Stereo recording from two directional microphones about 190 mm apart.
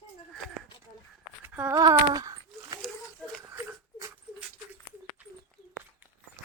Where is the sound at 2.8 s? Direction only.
Centre (ahead or behind).